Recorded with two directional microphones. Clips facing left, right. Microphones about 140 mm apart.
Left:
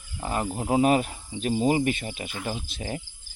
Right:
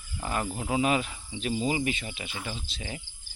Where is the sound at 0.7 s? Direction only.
45° left (ahead or behind).